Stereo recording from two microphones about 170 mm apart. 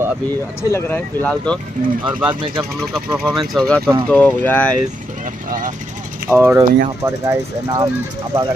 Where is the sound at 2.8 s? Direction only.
Centre (ahead or behind).